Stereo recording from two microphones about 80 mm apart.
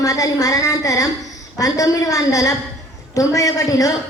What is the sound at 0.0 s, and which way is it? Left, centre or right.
A woman's voice, left.